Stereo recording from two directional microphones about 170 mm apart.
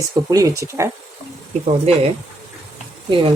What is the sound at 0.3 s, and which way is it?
Speech, 20° right (ahead or behind).